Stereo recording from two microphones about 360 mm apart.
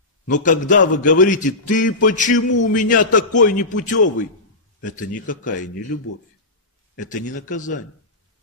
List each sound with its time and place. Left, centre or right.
0.4 s a man's voice: left
7.0 s a man's voice: left